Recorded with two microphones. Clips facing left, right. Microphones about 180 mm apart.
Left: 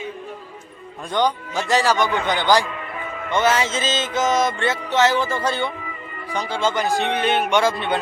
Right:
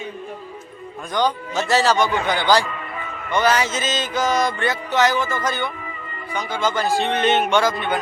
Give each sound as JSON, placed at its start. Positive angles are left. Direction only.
{"t": 1.1, "sound": "speech", "side_deg": 15}
{"t": 3.3, "sound": "music", "side_deg": 25}
{"t": 6.3, "sound": "speech", "side_deg": 30}
{"t": 7.6, "sound": "music", "side_deg": 30}